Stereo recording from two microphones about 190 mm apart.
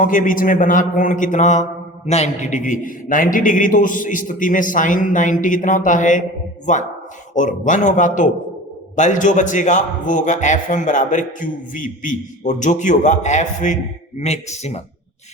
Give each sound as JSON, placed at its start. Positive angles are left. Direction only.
{"t": 0.0, "sound": "a man's voice", "side_deg": 45}